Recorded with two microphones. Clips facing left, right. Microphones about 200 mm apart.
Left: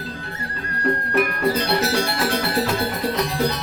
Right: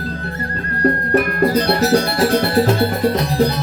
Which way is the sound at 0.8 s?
45° right (ahead or behind).